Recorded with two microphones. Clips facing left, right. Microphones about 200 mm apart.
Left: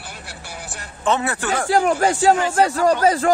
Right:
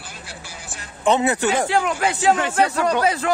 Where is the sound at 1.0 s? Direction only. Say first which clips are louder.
Right 3 dB; 20° right (ahead or behind).